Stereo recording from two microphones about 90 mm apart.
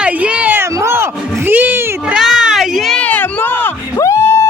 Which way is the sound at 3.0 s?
20° left (ahead or behind).